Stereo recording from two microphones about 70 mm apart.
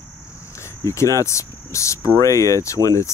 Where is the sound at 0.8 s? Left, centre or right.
Left.